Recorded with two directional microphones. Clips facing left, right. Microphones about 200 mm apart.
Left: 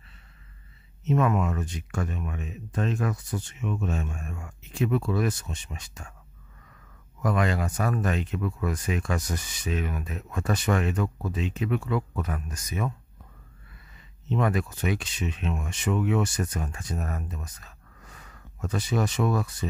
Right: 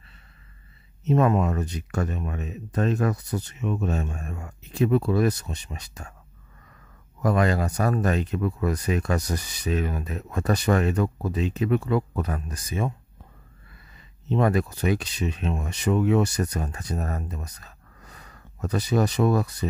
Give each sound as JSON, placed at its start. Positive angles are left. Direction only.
{"t": 1.0, "sound": "speech", "side_deg": -35}
{"t": 7.2, "sound": "speech", "side_deg": -35}
{"t": 14.3, "sound": "speech", "side_deg": -35}